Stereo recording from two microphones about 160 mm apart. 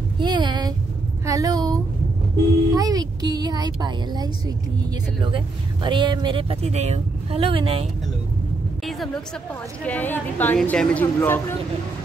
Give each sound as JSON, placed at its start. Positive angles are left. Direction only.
{"t": 0.2, "sound": "a sound", "side_deg": -25}
{"t": 1.2, "sound": "a woman's voice", "side_deg": -20}
{"t": 8.8, "sound": "music", "side_deg": 0}
{"t": 9.8, "sound": "a woman's voice", "side_deg": 10}